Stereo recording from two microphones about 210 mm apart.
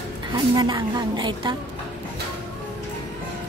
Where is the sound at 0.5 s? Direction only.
20° right (ahead or behind).